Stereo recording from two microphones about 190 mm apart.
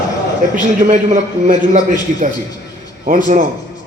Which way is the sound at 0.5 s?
40° right (ahead or behind).